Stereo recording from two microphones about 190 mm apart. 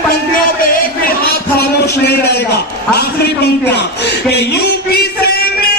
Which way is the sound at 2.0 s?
60° left (ahead or behind).